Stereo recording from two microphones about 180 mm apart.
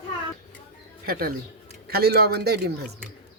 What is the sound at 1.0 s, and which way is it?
Speech, 55° right (ahead or behind).